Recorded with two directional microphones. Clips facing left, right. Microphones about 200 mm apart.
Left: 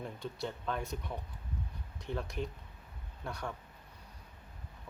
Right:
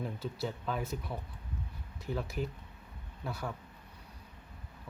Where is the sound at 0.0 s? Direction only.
5° right (ahead or behind).